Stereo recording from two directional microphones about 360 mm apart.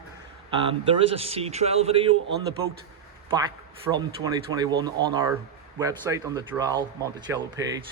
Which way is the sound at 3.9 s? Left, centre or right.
Centre.